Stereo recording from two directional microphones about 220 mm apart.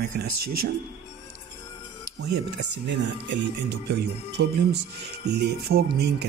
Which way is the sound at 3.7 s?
50° right (ahead or behind).